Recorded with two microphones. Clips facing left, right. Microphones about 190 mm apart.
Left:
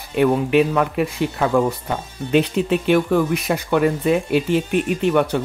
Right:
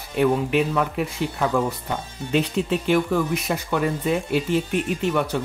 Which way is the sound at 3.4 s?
65° left (ahead or behind).